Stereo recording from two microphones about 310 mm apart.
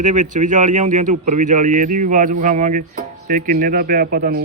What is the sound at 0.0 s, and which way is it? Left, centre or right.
Speech, right.